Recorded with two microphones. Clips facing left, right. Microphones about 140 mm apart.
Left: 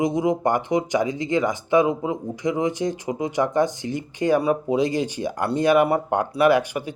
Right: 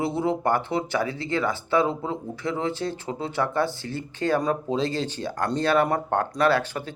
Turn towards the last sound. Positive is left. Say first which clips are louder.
# left 4 dB
turn(degrees=15)  # may be behind; listen again after turning